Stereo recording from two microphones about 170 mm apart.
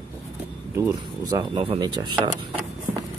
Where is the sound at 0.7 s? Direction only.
15° right (ahead or behind).